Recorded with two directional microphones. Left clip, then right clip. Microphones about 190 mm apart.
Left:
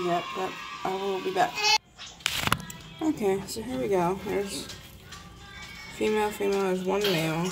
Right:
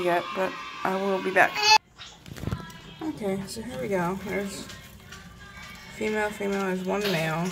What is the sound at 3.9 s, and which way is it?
Speech, 5° left (ahead or behind).